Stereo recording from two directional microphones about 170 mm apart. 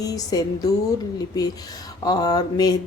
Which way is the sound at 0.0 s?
20° left (ahead or behind).